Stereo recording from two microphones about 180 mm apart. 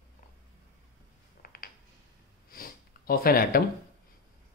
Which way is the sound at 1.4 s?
55° left (ahead or behind).